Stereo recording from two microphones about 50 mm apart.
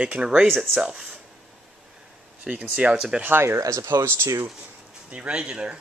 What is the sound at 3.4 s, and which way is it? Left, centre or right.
Speech, right.